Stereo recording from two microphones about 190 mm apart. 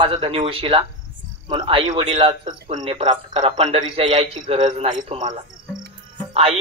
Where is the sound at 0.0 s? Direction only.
25° right (ahead or behind).